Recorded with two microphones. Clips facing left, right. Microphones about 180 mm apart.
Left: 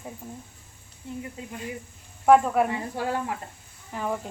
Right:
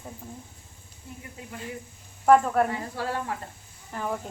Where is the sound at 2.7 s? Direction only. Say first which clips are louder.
Left 2 dB; 20° left (ahead or behind).